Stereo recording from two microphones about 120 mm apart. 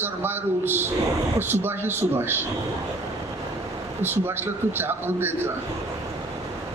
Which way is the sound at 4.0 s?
20° right (ahead or behind).